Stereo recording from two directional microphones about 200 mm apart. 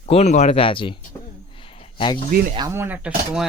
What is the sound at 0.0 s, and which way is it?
Speech, 30° left (ahead or behind).